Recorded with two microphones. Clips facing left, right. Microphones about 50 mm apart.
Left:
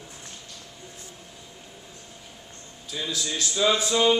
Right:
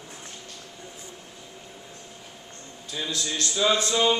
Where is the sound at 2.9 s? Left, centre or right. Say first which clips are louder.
Even; centre.